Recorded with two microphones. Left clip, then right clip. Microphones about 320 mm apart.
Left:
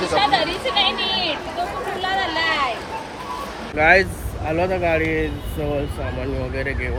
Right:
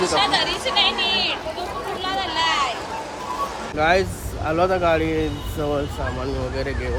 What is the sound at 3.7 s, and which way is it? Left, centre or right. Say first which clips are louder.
Speech: left 4 dB; centre.